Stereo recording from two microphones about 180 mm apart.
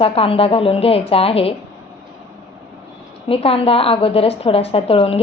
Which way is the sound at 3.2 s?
30° left (ahead or behind).